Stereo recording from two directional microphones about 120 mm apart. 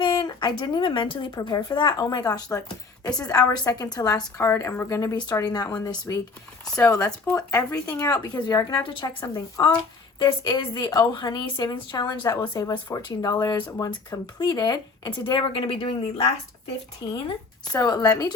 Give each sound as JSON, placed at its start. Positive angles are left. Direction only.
{"t": 0.0, "sound": "a woman's voice", "side_deg": 40}
{"t": 17.0, "sound": "speech", "side_deg": 35}